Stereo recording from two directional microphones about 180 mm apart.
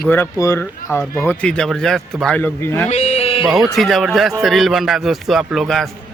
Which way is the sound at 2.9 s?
35° left (ahead or behind).